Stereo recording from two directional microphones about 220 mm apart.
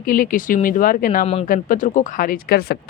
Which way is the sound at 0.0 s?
40° left (ahead or behind).